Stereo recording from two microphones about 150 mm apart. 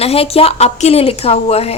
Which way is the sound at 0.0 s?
40° left (ahead or behind).